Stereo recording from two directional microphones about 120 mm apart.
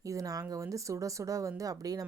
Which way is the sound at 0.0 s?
30° right (ahead or behind).